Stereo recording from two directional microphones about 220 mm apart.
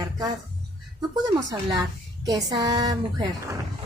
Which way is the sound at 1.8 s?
15° right (ahead or behind).